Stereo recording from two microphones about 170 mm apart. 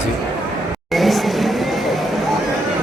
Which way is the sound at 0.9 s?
Centre (ahead or behind).